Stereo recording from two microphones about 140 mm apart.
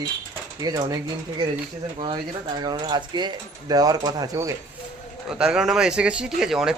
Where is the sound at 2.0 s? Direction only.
35° right (ahead or behind).